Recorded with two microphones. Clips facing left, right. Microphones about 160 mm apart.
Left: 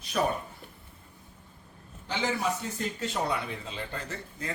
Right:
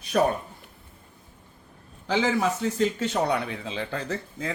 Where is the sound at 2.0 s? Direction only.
90° right.